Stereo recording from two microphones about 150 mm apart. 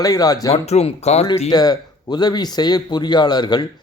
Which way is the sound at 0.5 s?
45° left (ahead or behind).